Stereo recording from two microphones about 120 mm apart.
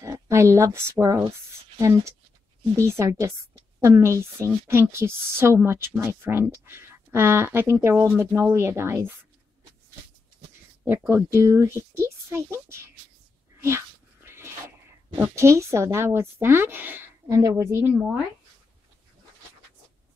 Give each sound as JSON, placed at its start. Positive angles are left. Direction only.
{"t": 0.0, "sound": "speech", "side_deg": -25}
{"t": 10.9, "sound": "speech", "side_deg": -20}
{"t": 13.6, "sound": "cat", "side_deg": -20}
{"t": 15.3, "sound": "speech", "side_deg": -25}
{"t": 17.4, "sound": "speech", "side_deg": -25}